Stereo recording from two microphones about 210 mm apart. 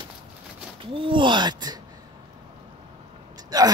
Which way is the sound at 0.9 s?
25° right (ahead or behind).